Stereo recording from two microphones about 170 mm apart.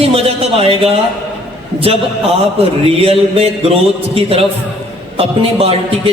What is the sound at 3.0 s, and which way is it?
A man's voice, 35° right (ahead or behind).